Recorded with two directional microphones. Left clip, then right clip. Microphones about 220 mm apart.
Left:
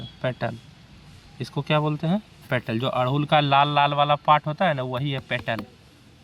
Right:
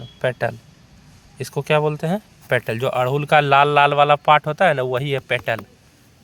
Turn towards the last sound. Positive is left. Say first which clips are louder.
# right 6 dB
turn(degrees=-45)  # may be behind; listen again after turning